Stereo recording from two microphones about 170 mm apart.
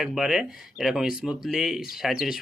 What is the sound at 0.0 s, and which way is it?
Speech, centre (ahead or behind).